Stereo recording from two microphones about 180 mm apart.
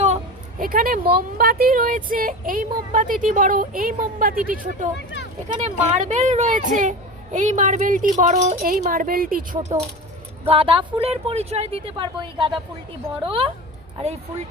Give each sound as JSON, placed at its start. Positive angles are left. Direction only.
{"t": 0.6, "sound": "speech", "side_deg": -50}
{"t": 4.9, "sound": "speech", "side_deg": 75}
{"t": 5.5, "sound": "speech", "side_deg": -40}
{"t": 10.5, "sound": "speech", "side_deg": -30}